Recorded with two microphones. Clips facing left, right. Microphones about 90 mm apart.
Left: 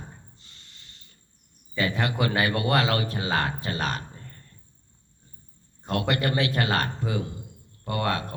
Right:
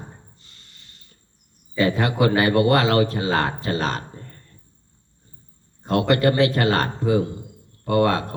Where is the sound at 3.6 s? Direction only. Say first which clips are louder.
Right 5 dB; 35° right (ahead or behind).